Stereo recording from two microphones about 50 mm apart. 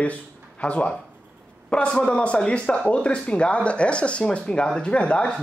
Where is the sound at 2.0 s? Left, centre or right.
Left.